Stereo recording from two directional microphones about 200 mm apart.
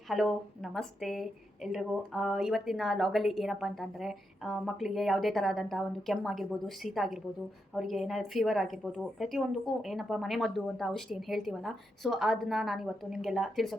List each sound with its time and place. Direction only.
0.1 s a woman's voice: centre (ahead or behind)